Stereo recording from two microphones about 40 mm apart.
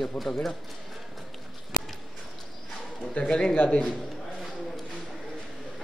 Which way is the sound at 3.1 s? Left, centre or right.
Left.